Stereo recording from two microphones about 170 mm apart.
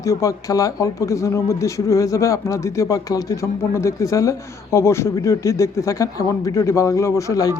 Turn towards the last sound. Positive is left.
turn(degrees=20)  # may be behind; listen again after turning